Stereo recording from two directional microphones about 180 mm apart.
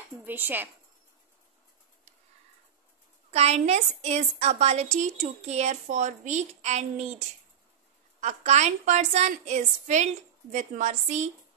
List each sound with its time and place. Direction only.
0.2 s speech: 10° right (ahead or behind)
3.3 s a woman's voice: 35° right (ahead or behind)
8.2 s a woman's voice: 40° right (ahead or behind)